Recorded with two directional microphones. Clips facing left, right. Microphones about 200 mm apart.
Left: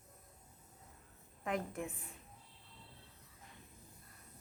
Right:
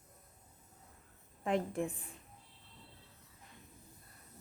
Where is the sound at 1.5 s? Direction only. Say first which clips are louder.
Right 5 dB; 30° right (ahead or behind).